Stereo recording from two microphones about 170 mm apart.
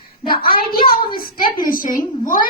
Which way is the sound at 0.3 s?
60° left (ahead or behind).